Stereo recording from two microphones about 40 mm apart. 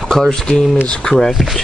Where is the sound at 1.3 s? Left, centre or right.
Centre.